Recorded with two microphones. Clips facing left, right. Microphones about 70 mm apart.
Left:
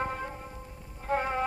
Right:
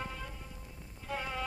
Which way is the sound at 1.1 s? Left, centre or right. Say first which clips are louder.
Left 9 dB; left.